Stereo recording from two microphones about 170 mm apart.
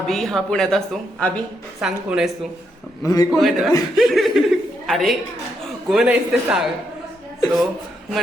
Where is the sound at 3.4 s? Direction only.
Centre (ahead or behind).